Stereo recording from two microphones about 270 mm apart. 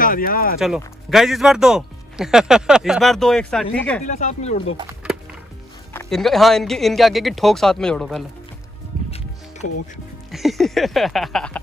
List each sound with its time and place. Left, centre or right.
0.0 s speech: left
0.6 s speech: centre
4.0 s speech: left
5.9 s speech: centre
9.6 s speech: left
10.3 s speech: centre